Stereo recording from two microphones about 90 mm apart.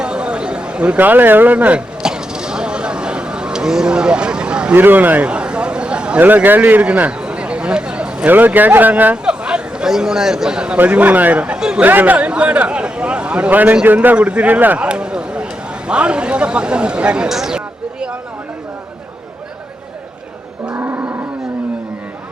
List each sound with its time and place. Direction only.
0.0 s a sound: 10° right (ahead or behind)
11.9 s a man's voice: 20° right (ahead or behind)
20.7 s cattle: 25° right (ahead or behind)